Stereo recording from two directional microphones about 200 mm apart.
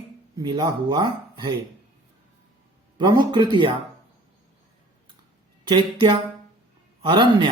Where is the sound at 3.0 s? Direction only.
20° right (ahead or behind).